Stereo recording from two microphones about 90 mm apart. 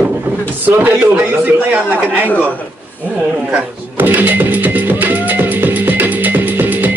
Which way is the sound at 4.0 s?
20° right (ahead or behind).